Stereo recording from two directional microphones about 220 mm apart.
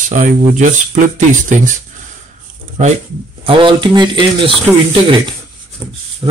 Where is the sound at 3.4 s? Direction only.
20° right (ahead or behind).